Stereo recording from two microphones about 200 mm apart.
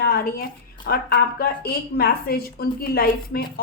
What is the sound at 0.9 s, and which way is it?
A woman's voice, 50° left (ahead or behind).